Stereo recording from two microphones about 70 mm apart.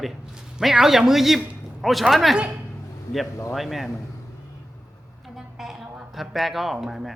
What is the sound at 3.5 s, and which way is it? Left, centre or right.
Speech, centre.